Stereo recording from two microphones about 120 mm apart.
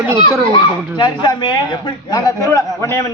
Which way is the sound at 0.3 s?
40° left (ahead or behind).